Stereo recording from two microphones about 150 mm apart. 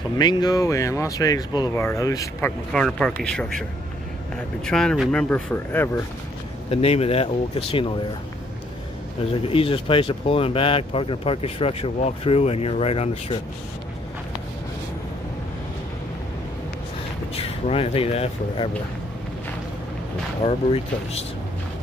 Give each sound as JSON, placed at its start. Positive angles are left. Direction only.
{"t": 0.2, "sound": "speech", "side_deg": 30}
{"t": 2.7, "sound": "speech", "side_deg": 5}
{"t": 4.6, "sound": "speech", "side_deg": 5}
{"t": 5.3, "sound": "speech", "side_deg": 10}
{"t": 6.7, "sound": "speech", "side_deg": 40}
{"t": 9.3, "sound": "speech", "side_deg": 40}
{"t": 17.4, "sound": "speech", "side_deg": 40}
{"t": 20.4, "sound": "speech", "side_deg": 40}